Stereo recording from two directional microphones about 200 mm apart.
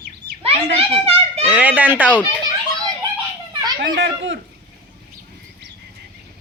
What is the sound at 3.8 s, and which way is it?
Speech, 65° right (ahead or behind).